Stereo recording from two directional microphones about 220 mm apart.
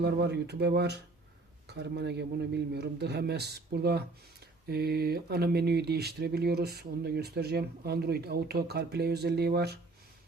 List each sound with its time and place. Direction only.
0.0 s speech: 50° right (ahead or behind)